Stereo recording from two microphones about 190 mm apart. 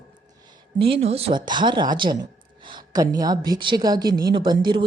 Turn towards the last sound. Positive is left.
turn(degrees=-25)  # may be behind; listen again after turning